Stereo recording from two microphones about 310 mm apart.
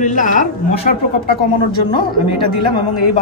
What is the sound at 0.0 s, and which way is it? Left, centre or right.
Speech, left.